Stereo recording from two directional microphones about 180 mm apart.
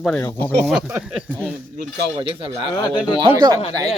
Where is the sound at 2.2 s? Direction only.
25° right (ahead or behind).